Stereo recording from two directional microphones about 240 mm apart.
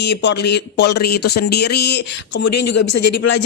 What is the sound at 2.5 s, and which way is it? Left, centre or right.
Speech, left.